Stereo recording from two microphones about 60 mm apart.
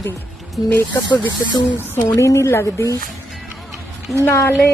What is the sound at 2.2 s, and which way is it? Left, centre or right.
Speech, left.